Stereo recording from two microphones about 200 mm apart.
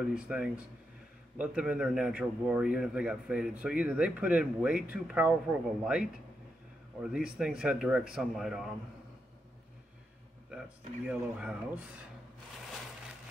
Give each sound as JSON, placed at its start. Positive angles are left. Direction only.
{"t": 0.0, "sound": "a man's voice", "side_deg": -5}
{"t": 11.1, "sound": "a man's voice", "side_deg": -5}